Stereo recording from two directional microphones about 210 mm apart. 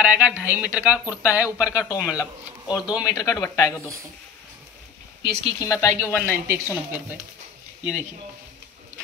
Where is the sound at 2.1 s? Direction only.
15° left (ahead or behind).